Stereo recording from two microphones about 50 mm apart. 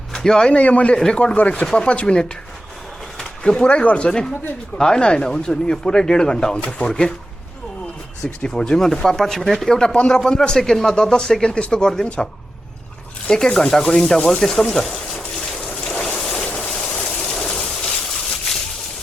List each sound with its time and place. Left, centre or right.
0.1 s a man's voice: centre
0.5 s speech: left
0.9 s speech: centre
1.2 s speech: left
3.4 s speech: centre
8.4 s speech: centre
14.4 s a sound: centre
15.6 s boat: centre
16.6 s a sound: centre